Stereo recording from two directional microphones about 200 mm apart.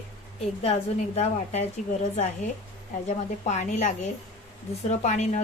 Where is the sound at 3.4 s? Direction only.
35° left (ahead or behind).